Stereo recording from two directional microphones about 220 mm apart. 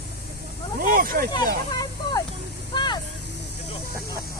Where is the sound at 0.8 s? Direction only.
40° right (ahead or behind).